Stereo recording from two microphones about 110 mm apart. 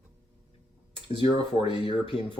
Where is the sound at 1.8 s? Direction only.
55° left (ahead or behind).